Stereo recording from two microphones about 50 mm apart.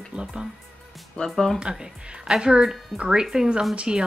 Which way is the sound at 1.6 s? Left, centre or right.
Centre.